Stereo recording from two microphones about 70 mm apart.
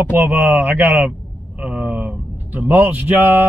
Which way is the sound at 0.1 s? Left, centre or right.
Right.